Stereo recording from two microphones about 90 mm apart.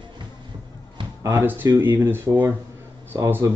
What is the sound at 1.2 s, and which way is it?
Speech, 35° right (ahead or behind).